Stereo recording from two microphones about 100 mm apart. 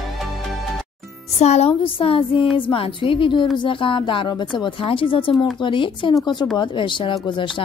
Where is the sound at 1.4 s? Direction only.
90° left.